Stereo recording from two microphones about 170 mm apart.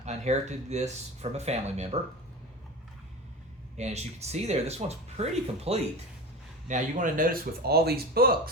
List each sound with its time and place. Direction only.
0.0 s speech: 40° right (ahead or behind)
3.8 s speech: 40° right (ahead or behind); by 8.4 s 65° right (ahead or behind)